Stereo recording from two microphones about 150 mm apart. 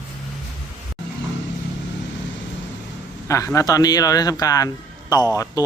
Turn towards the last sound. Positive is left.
turn(degrees=25)  # may be behind; listen again after turning